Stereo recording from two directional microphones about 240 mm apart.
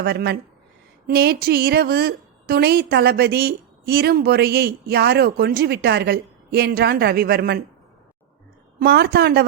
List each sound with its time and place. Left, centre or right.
0.0 s a woman's voice: right
8.8 s a woman's voice: right